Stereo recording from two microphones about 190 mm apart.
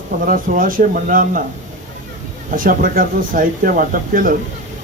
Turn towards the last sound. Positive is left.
turn(degrees=-45)  # may be behind; listen again after turning